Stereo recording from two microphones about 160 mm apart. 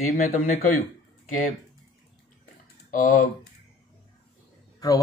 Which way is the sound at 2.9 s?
55° left (ahead or behind).